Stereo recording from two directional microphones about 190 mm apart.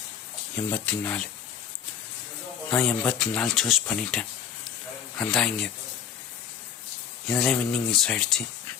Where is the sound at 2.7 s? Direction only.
5° left (ahead or behind).